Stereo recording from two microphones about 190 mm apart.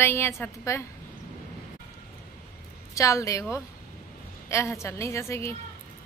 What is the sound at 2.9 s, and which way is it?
Speech, 15° left (ahead or behind).